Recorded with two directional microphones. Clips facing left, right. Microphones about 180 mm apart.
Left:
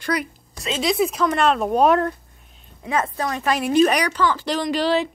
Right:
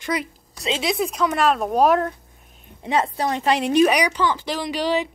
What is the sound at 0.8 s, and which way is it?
Speech, centre (ahead or behind).